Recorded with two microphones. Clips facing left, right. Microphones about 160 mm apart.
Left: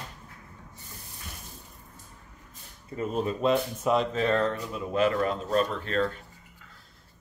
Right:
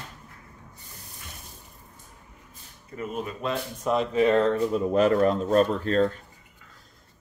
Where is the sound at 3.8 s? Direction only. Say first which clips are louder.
Right 4 dB; centre (ahead or behind).